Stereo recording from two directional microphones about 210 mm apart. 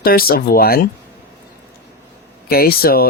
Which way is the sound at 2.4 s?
45° left (ahead or behind).